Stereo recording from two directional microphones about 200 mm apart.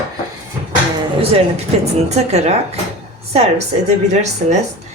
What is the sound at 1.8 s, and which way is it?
A woman's voice, 35° right (ahead or behind).